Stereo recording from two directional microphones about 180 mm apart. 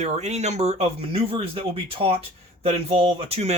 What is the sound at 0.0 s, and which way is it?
Speech, 40° right (ahead or behind).